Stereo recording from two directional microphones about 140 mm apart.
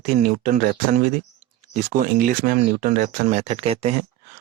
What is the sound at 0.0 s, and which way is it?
Speech, 70° right (ahead or behind).